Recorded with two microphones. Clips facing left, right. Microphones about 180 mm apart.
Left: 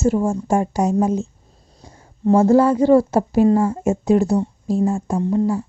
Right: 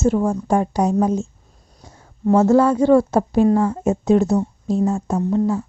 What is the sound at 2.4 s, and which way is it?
Speech, 10° left (ahead or behind).